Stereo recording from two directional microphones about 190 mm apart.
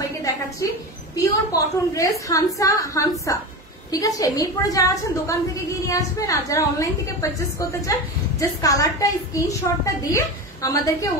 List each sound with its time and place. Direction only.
1.1 s a woman's voice: 15° left (ahead or behind)